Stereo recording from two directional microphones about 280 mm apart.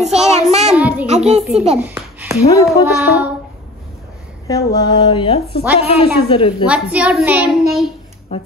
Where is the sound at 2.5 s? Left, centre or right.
Centre.